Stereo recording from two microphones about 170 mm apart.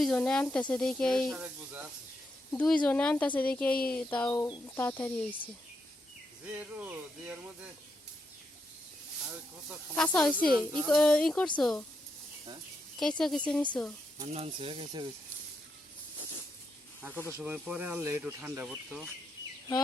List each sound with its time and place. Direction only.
0.0 s speech: 5° left (ahead or behind)
1.4 s speech: 10° right (ahead or behind)
2.5 s speech: 5° left (ahead or behind)
6.4 s speech: 10° right (ahead or behind)
9.9 s speech: 5° left (ahead or behind)
10.5 s speech: 25° right (ahead or behind)
10.8 s speech: 5° left (ahead or behind)
13.0 s speech: centre (ahead or behind)
14.3 s speech: 35° right (ahead or behind)
17.3 s speech: 10° right (ahead or behind)